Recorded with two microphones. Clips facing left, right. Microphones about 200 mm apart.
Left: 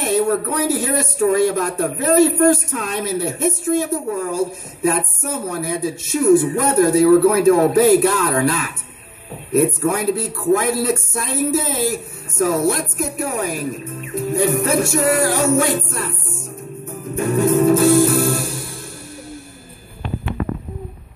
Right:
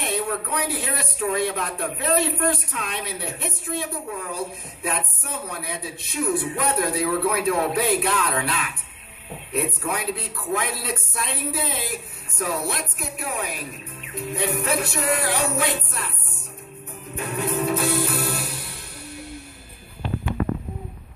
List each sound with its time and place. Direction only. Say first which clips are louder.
0.0 s speech: left 9 dB; 45° left (ahead or behind)
17.1 s music: left 10 dB; 45° left (ahead or behind)